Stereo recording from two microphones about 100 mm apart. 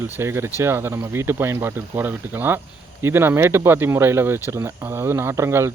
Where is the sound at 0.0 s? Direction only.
25° right (ahead or behind).